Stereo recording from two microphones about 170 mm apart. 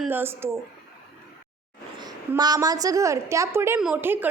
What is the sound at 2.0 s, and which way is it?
A woman's voice, 25° right (ahead or behind).